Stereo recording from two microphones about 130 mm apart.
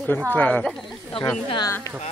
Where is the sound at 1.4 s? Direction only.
35° left (ahead or behind).